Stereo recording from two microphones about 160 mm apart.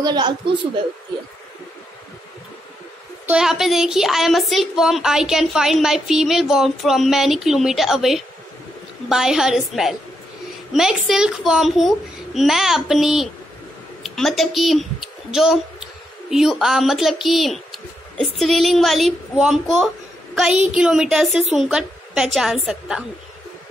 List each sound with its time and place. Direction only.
0.0 s a woman's voice: 25° right (ahead or behind)
3.3 s a woman's voice: 5° right (ahead or behind)